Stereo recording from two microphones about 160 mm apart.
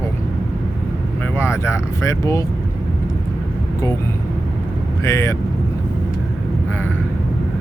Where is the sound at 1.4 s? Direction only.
15° left (ahead or behind).